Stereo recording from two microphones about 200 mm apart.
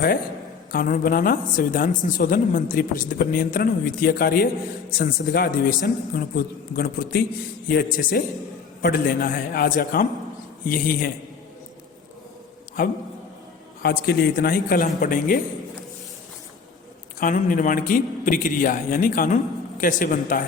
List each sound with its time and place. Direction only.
0.7 s speech: 45° left (ahead or behind)
12.8 s speech: 45° left (ahead or behind)
17.2 s speech: 40° left (ahead or behind)